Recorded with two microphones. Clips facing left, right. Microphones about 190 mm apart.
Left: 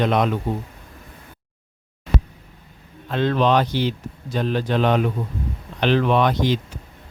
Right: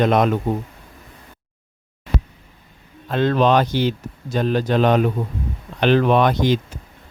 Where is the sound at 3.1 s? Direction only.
45° right (ahead or behind).